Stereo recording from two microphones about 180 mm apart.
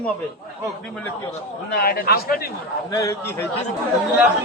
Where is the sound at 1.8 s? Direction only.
60° left (ahead or behind).